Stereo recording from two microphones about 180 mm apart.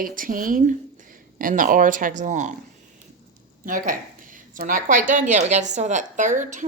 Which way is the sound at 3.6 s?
50° right (ahead or behind).